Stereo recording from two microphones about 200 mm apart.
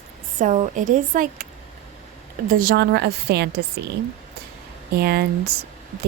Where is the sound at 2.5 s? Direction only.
45° right (ahead or behind).